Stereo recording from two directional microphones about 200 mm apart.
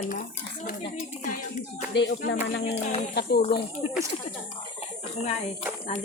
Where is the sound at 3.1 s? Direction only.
55° left (ahead or behind).